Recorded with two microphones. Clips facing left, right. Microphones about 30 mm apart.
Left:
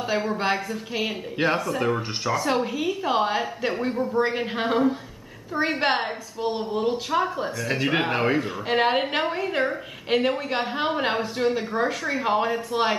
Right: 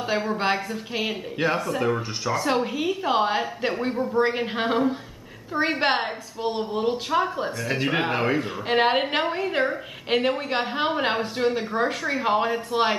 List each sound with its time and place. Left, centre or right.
0.1 s a woman's voice: centre
1.4 s speech: centre
1.8 s a woman's voice: centre